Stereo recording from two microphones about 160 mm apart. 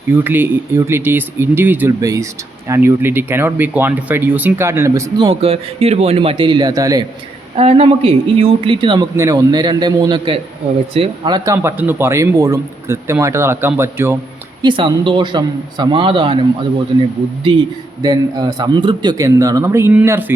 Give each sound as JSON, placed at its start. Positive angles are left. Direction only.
{"t": 0.1, "sound": "speech", "side_deg": -15}
{"t": 7.5, "sound": "speech", "side_deg": -40}
{"t": 11.5, "sound": "speech", "side_deg": -15}
{"t": 14.6, "sound": "speech", "side_deg": -30}